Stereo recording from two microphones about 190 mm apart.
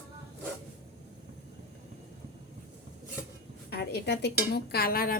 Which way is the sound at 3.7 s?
60° left (ahead or behind).